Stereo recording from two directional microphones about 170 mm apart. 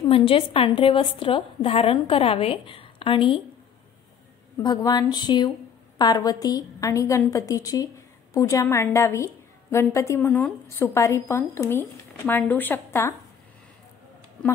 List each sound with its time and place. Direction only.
0.1 s a woman's voice: 35° left (ahead or behind)
4.6 s a woman's voice: 25° left (ahead or behind)